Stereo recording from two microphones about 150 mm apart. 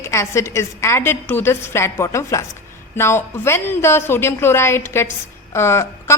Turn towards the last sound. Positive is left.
turn(degrees=20)  # may be behind; listen again after turning